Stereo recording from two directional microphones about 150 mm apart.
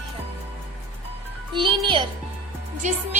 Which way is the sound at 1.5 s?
35° right (ahead or behind).